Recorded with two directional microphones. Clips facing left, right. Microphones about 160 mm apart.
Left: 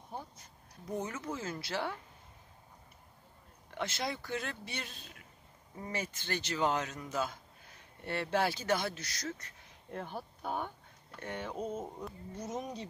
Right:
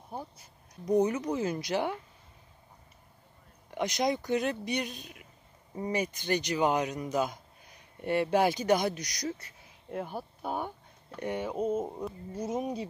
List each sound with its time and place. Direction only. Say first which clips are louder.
0.1 s speech: right 4 dB; 15° right (ahead or behind)
3.7 s speech: right 8 dB; 15° right (ahead or behind)